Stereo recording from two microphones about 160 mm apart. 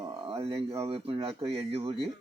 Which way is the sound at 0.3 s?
35° right (ahead or behind).